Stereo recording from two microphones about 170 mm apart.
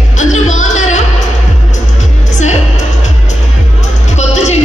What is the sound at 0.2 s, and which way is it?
Music, 45° left (ahead or behind).